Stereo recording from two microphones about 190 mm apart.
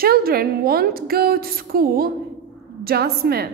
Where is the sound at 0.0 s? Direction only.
50° right (ahead or behind).